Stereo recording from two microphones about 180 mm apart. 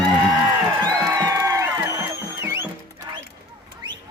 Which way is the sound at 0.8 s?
20° right (ahead or behind).